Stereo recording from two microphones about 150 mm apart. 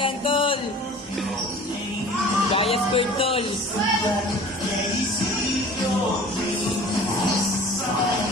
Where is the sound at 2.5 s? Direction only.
40° left (ahead or behind).